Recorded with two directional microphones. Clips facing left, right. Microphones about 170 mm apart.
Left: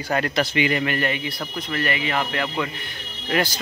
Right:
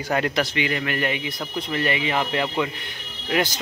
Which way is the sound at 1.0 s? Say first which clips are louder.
Left 1 dB; 15° right (ahead or behind).